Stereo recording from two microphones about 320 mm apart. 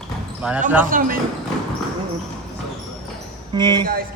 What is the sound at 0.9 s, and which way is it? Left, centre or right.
Speech, right.